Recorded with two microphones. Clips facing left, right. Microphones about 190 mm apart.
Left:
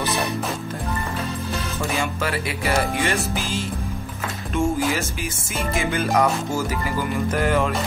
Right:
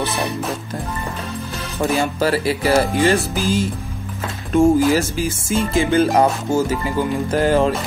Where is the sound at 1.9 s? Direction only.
35° right (ahead or behind).